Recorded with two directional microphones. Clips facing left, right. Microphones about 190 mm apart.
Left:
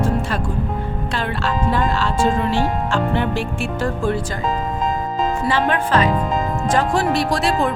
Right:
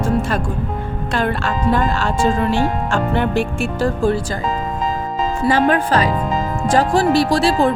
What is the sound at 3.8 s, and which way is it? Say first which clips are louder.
Speech: right 4 dB; 35° right (ahead or behind).